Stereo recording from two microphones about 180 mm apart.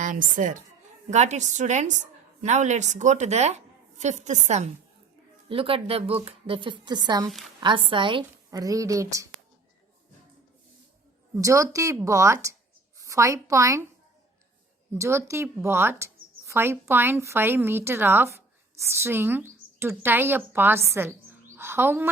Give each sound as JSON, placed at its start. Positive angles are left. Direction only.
{"t": 0.0, "sound": "a woman's voice", "side_deg": -45}
{"t": 5.5, "sound": "a woman's voice", "side_deg": -30}
{"t": 11.3, "sound": "a woman's voice", "side_deg": -15}
{"t": 14.9, "sound": "a woman's voice", "side_deg": -15}
{"t": 21.5, "sound": "a sound", "side_deg": -15}